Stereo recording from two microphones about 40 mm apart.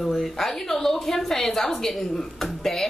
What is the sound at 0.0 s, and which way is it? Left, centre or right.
A woman's voice, centre.